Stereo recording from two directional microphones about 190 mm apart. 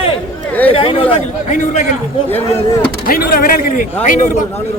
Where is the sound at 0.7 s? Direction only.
30° left (ahead or behind).